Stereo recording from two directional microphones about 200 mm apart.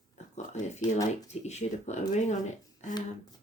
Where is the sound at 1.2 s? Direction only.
35° left (ahead or behind).